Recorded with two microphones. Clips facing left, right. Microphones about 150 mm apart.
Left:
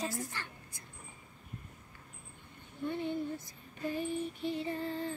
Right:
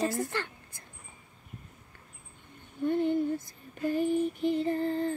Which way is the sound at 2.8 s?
55° right (ahead or behind).